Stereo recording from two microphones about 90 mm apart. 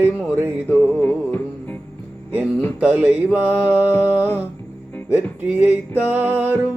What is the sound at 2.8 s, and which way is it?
Mantra, 15° right (ahead or behind).